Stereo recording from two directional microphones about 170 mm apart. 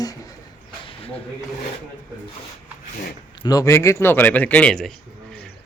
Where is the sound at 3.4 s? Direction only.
20° left (ahead or behind); by 4.9 s 5° left (ahead or behind).